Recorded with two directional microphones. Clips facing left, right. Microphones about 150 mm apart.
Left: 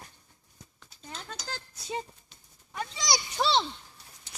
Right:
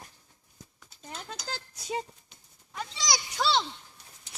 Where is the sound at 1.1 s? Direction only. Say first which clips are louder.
Right 1 dB; 10° right (ahead or behind).